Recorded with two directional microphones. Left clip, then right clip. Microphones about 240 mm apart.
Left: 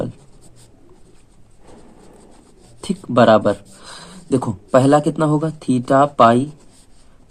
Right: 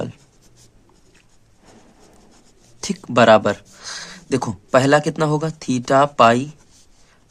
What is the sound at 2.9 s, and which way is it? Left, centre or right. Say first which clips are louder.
Speech: even; right.